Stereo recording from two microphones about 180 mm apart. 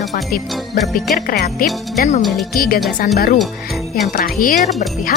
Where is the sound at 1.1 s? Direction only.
55° left (ahead or behind).